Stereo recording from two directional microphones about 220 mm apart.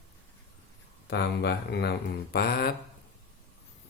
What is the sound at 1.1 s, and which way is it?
Speech, 50° left (ahead or behind).